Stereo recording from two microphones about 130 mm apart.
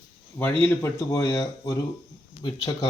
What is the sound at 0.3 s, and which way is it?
Speech, 15° left (ahead or behind).